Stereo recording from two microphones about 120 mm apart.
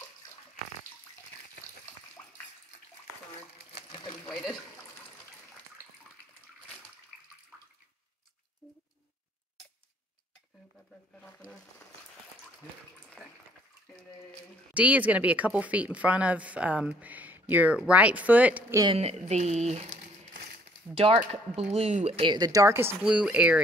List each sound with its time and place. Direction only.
13.2 s water: 10° right (ahead or behind)
14.7 s speech: 10° right (ahead or behind)
18.9 s speech: 65° right (ahead or behind)
22.2 s a woman's voice: 35° right (ahead or behind); by 22.9 s 20° right (ahead or behind)
23.0 s speech: 10° right (ahead or behind)